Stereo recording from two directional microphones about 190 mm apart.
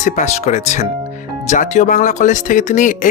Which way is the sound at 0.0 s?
40° left (ahead or behind).